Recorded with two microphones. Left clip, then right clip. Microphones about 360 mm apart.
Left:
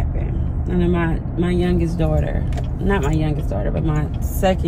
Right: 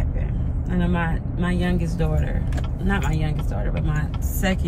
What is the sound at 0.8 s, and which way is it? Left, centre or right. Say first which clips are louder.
Speech: left 5 dB; centre.